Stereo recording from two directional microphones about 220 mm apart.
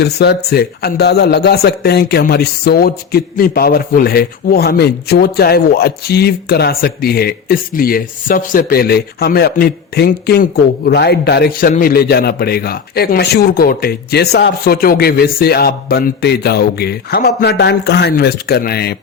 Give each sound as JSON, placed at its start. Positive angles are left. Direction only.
{"t": 0.0, "sound": "a man's voice", "side_deg": 45}